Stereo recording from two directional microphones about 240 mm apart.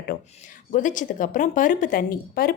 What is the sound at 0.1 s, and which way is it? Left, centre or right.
Speech, left.